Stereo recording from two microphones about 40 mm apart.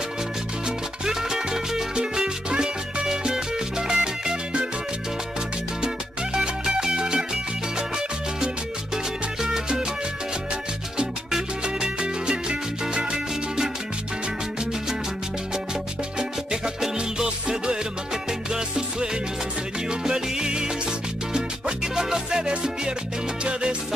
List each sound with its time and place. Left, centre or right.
0.7 s salsa music: centre
3.1 s music: centre
6.3 s music: centre
8.9 s salsa music: centre
11.6 s salsa music: right
12.9 s music: right
16.2 s music: centre
23.4 s music: right